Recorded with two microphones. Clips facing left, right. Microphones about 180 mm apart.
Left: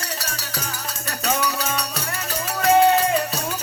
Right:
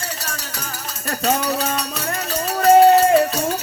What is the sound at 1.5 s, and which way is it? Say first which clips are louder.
Music: right 4 dB; 50° right (ahead or behind).